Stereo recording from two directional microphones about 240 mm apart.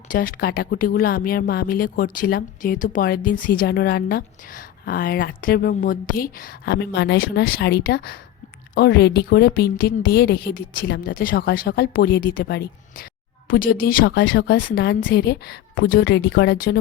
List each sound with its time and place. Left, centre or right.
0.1 s a woman's voice: left